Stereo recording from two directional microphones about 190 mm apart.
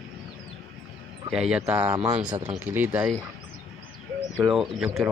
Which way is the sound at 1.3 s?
5° right (ahead or behind).